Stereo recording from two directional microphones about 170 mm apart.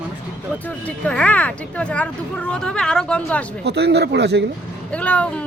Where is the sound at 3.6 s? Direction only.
80° right.